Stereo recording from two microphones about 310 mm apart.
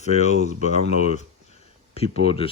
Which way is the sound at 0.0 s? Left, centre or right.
Left.